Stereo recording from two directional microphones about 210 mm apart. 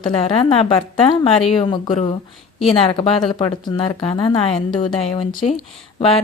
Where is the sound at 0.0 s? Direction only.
25° left (ahead or behind).